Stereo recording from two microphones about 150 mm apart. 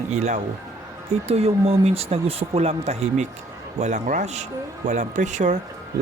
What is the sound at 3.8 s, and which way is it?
Speech, 55° right (ahead or behind).